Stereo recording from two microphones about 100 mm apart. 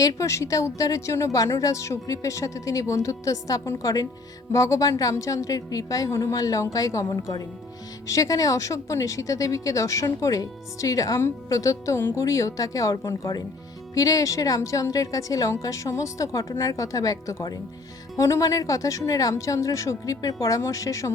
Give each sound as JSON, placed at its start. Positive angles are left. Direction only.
{"t": 0.0, "sound": "speech", "side_deg": 35}